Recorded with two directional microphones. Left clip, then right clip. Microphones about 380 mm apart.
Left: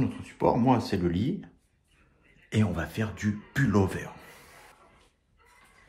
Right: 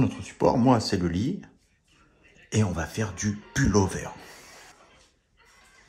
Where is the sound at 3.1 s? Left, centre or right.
Left.